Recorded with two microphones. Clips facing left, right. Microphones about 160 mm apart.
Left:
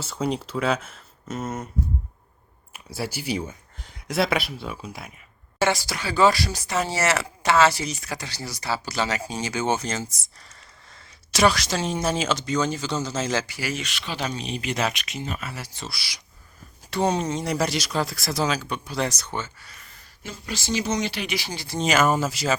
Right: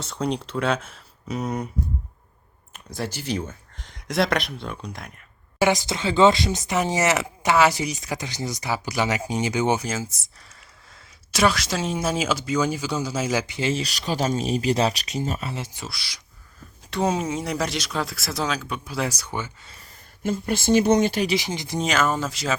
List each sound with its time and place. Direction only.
0.0 s speech: 5° left (ahead or behind)
2.7 s speech: 10° left (ahead or behind)
5.5 s speech: 15° right (ahead or behind)
13.5 s speech: 25° right (ahead or behind)
13.8 s speech: 40° right (ahead or behind)
15.4 s speech: 20° right (ahead or behind)
15.9 s speech: 10° left (ahead or behind)
16.9 s speech: centre (ahead or behind)
20.2 s speech: 50° right (ahead or behind)
21.3 s speech: 20° right (ahead or behind)
21.8 s speech: 10° left (ahead or behind)